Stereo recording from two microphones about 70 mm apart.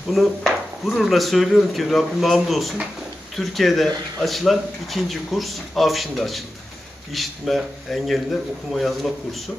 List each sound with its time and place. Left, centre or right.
0.1 s speech: centre